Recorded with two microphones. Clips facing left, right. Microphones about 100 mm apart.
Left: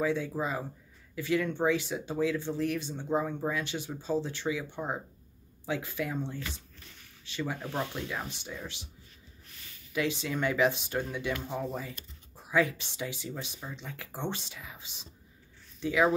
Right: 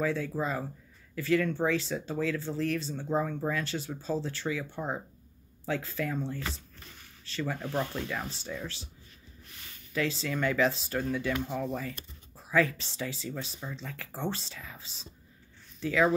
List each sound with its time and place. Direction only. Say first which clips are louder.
0.0 s speech: even; 20° left (ahead or behind)
9.9 s speech: even; 15° left (ahead or behind)